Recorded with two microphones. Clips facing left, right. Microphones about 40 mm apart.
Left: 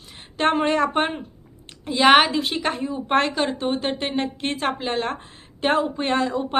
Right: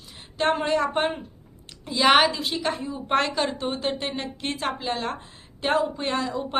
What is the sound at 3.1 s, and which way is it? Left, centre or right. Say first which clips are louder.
Speech: left 2 dB; left.